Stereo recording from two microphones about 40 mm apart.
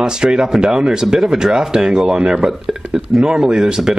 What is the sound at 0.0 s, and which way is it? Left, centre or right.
Speech, centre.